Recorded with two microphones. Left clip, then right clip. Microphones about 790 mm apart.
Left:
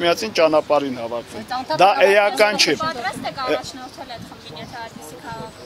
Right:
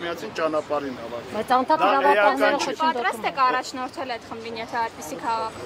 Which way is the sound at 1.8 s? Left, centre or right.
Left.